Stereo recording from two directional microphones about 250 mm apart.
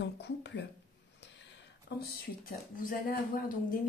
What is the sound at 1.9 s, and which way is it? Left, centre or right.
Speech, left.